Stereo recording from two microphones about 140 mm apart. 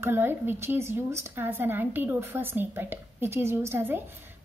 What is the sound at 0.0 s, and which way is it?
A woman's voice, 15° right (ahead or behind).